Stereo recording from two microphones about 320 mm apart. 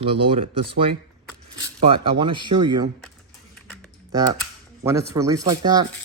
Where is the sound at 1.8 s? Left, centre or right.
Centre.